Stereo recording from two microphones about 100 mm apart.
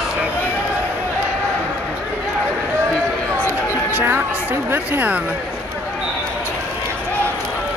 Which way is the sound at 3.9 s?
20° right (ahead or behind).